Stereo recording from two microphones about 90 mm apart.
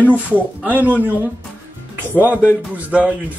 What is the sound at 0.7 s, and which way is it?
Speech, 20° right (ahead or behind).